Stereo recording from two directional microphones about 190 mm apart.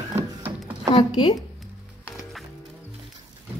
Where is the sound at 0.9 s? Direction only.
20° left (ahead or behind).